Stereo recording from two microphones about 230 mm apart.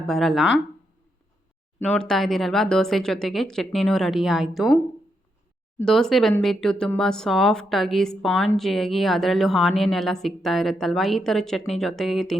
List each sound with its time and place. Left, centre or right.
0.0 s a woman's voice: centre
1.8 s a woman's voice: centre
5.8 s a woman's voice: centre